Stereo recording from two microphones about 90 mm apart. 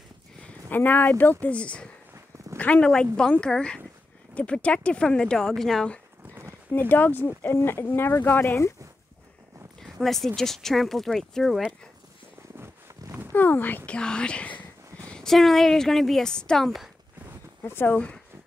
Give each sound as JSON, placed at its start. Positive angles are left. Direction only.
{"t": 0.7, "sound": "speech", "side_deg": 20}
{"t": 6.7, "sound": "speech", "side_deg": 20}
{"t": 9.8, "sound": "a woman's voice", "side_deg": 5}
{"t": 13.3, "sound": "a woman's voice", "side_deg": 20}
{"t": 17.6, "sound": "speech", "side_deg": 20}